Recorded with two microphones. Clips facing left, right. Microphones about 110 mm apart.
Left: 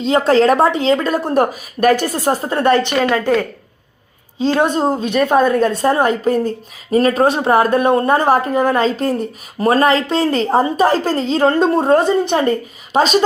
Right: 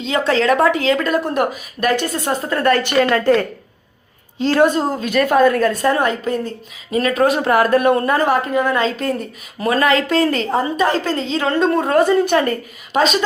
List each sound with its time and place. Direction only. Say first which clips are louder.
0.0 s speech: left 5 dB; 40° left (ahead or behind)
3.0 s a woman's voice: right 1 dB; 15° left (ahead or behind); by 13.1 s 30° left (ahead or behind)